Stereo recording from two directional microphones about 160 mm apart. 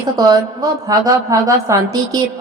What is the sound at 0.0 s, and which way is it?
A woman's voice, 20° right (ahead or behind).